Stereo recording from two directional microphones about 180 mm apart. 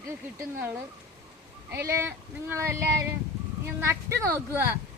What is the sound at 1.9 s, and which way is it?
A woman's voice, 15° right (ahead or behind).